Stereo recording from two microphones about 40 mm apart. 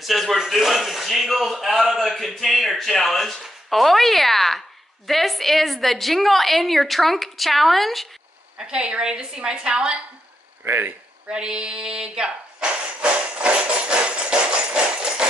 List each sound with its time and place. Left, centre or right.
0.0 s a woman's voice: centre
8.5 s a woman's voice: right
10.6 s speech: right
11.2 s a sound: right